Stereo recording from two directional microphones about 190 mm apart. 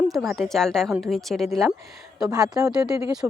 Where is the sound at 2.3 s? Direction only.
20° right (ahead or behind).